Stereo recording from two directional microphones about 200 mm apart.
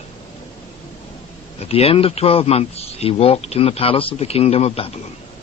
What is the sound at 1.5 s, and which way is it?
A man's voice, 30° left (ahead or behind).